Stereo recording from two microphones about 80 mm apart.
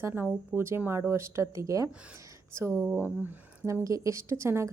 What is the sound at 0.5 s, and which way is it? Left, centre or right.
A woman's voice, right.